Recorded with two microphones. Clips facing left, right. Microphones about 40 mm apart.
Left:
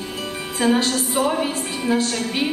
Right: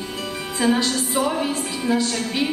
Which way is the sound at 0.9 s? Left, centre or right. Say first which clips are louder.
Left 1 dB; centre.